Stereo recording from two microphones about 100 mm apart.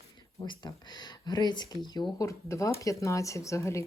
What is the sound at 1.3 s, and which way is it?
Speech, 45° left (ahead or behind).